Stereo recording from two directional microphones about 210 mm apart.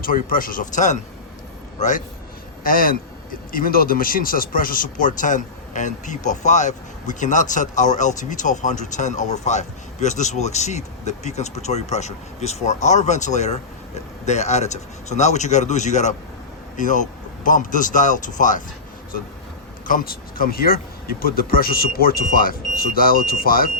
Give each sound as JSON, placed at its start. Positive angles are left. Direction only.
{"t": 0.0, "sound": "speech", "side_deg": 40}
{"t": 2.6, "sound": "speech", "side_deg": 40}
{"t": 19.9, "sound": "speech", "side_deg": 40}